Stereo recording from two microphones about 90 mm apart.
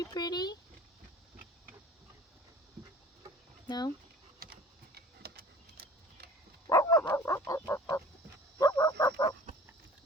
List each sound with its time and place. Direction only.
0.0 s speech: 45° left (ahead or behind)
3.7 s speech: 50° left (ahead or behind)
6.7 s dog: 40° left (ahead or behind)
7.4 s fowl: 40° left (ahead or behind)
8.5 s fowl: 50° left (ahead or behind)